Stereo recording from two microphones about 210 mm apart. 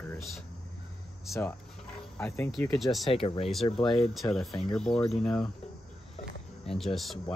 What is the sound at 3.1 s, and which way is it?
Speech, 25° left (ahead or behind).